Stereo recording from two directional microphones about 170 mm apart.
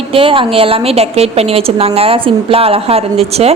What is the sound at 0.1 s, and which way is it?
A woman's voice, 30° right (ahead or behind).